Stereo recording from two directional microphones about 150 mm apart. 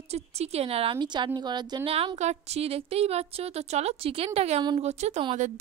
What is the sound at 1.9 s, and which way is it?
A woman's voice, 40° right (ahead or behind).